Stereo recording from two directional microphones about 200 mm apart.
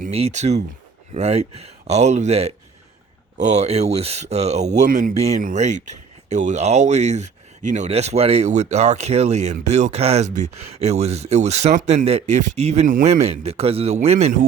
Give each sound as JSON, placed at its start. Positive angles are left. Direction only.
{"t": 0.0, "sound": "speech", "side_deg": -35}